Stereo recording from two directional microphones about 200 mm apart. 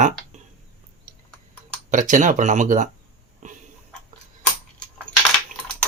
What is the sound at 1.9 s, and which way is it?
Speech, 40° right (ahead or behind).